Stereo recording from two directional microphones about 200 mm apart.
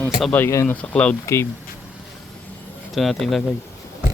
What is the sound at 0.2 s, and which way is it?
Speech, 10° left (ahead or behind).